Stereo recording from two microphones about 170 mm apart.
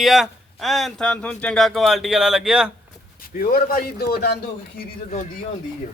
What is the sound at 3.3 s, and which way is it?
A man's voice, 55° left (ahead or behind).